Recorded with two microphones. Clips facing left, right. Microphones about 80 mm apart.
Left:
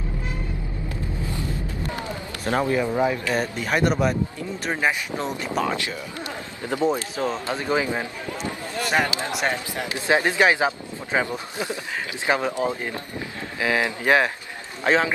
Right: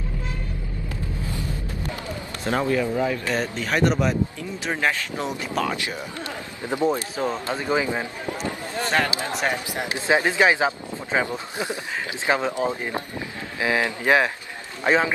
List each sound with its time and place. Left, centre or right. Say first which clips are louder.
2.6 s speech: left 1 dB; left
3.3 s speech: even; centre
6.6 s speech: even; centre